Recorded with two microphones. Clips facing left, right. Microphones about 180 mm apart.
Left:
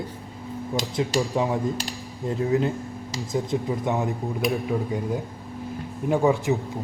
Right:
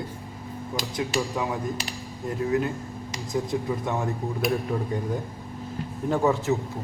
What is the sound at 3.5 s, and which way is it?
Speech, 20° left (ahead or behind).